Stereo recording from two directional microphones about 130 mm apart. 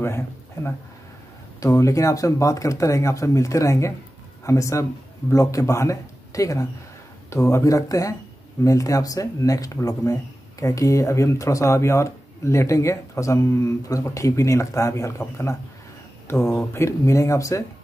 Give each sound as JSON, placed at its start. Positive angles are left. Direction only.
{"t": 1.6, "sound": "speech", "side_deg": 25}